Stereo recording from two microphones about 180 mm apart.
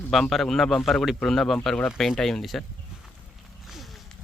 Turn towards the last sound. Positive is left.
turn(degrees=0)  # may be behind; listen again after turning